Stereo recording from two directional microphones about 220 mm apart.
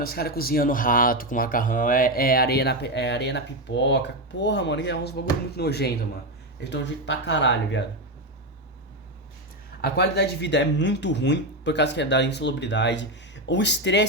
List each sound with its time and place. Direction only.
0.0 s speech: 45° left (ahead or behind)
9.8 s speech: 45° left (ahead or behind)